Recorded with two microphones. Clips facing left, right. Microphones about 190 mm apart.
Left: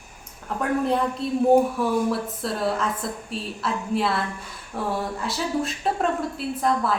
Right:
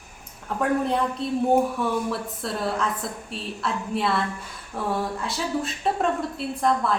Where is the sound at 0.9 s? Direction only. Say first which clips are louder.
Left 1 dB; centre (ahead or behind).